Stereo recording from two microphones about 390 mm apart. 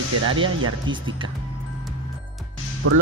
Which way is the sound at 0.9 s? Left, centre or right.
Centre.